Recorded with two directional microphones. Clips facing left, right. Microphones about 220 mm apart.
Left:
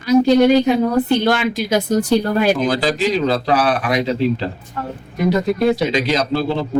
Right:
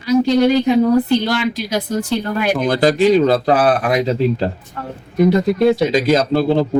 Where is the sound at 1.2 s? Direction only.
55° left (ahead or behind).